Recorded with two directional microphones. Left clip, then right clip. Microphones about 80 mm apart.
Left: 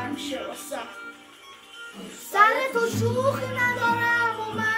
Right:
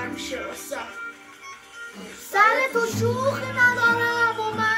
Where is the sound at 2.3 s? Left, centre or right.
Left.